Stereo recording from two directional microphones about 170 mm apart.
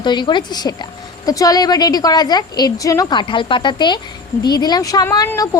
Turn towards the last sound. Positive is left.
turn(degrees=20)  # may be behind; listen again after turning